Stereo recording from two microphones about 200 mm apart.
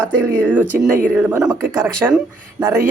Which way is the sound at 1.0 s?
10° right (ahead or behind).